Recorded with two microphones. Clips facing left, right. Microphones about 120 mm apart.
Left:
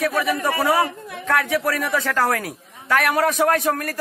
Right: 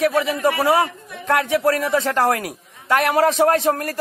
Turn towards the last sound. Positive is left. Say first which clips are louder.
# right 2 dB
turn(degrees=-25)  # may be behind; listen again after turning